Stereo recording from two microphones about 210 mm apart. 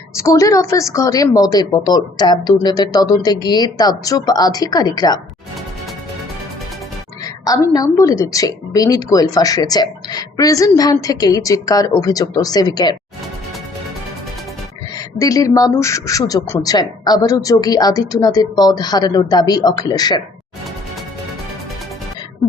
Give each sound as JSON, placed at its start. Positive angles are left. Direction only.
{"t": 0.2, "sound": "a woman's voice", "side_deg": 15}
{"t": 7.4, "sound": "a woman's voice", "side_deg": 15}
{"t": 14.9, "sound": "a woman's voice", "side_deg": 15}